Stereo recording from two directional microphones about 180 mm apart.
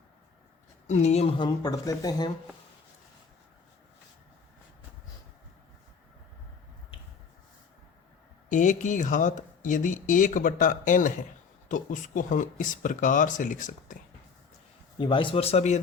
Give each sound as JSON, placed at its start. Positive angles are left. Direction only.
{"t": 0.9, "sound": "a woman's voice", "side_deg": 40}
{"t": 8.4, "sound": "speech", "side_deg": 45}
{"t": 14.9, "sound": "speech", "side_deg": 25}